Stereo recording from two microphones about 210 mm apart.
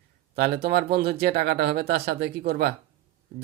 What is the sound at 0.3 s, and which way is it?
Speech, 50° right (ahead or behind).